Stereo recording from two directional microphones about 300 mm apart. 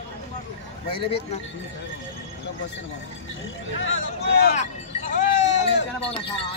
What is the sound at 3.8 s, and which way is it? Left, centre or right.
Speech, left.